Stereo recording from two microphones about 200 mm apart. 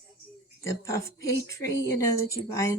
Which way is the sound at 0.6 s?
15° left (ahead or behind).